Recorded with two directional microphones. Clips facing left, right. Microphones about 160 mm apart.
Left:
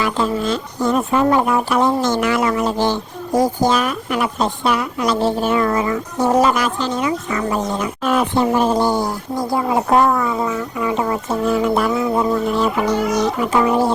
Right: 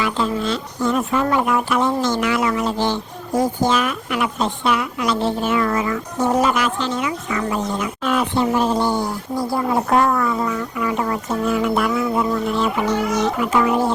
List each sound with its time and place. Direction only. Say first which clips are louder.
0.0 s speech: left 2 dB; 45° left (ahead or behind)
2.0 s speech: left 2 dB; 45° left (ahead or behind)
9.3 s speech: left 1 dB; 20° left (ahead or behind)